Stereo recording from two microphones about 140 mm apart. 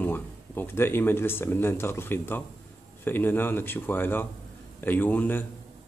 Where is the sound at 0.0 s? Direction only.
15° left (ahead or behind).